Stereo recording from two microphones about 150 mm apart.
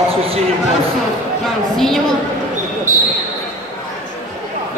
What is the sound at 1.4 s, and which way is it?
Speech, centre (ahead or behind).